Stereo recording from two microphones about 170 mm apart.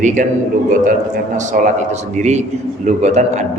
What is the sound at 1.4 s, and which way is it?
A man's voice, 45° right (ahead or behind).